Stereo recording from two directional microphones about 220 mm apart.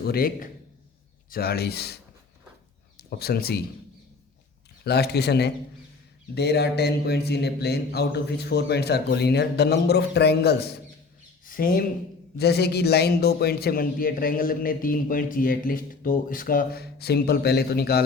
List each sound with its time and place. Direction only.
0.0 s a man's voice: 45° left (ahead or behind)
3.0 s speech: 45° left (ahead or behind)
4.8 s a man's voice: 45° left (ahead or behind)